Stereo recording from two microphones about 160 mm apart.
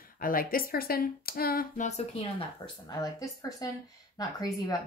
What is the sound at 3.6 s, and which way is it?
Speech, 20° left (ahead or behind).